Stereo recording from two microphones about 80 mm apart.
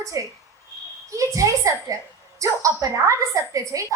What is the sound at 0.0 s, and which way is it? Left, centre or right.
A woman's voice, right.